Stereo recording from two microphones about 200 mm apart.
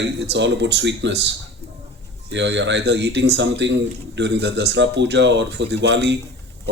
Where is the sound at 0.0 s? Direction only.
60° right (ahead or behind).